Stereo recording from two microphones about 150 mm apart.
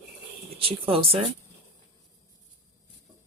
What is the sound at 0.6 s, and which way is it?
Speech, 35° right (ahead or behind).